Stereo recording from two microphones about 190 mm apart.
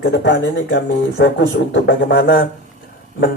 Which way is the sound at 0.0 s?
65° left (ahead or behind).